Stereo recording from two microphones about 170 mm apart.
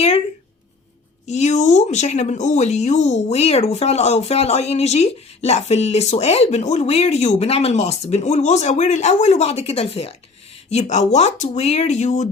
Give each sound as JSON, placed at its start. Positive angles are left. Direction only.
{"t": 1.3, "sound": "speech", "side_deg": 40}